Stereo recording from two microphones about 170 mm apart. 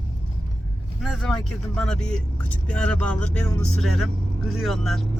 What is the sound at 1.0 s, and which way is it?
Speech, centre (ahead or behind).